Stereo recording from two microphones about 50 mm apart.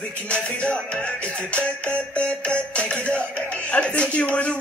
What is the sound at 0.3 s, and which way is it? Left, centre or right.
Music, left.